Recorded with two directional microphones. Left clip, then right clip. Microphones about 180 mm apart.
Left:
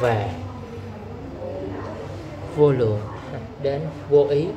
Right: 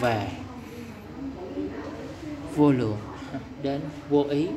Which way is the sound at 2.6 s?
30° right (ahead or behind).